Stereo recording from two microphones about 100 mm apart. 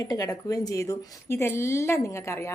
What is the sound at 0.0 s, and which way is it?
A woman's voice, 40° left (ahead or behind).